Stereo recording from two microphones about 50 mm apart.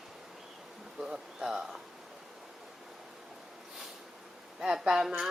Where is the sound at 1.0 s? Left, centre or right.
Centre.